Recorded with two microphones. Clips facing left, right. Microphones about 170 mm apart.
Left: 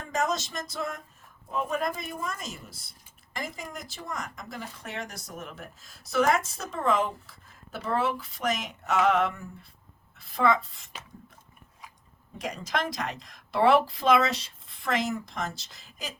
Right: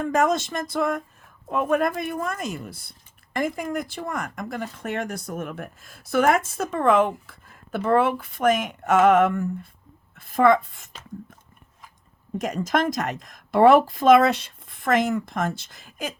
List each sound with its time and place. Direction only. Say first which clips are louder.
0.0 s a woman's voice: right 8 dB; 55° right (ahead or behind)
12.4 s a woman's voice: right 7 dB; 50° right (ahead or behind)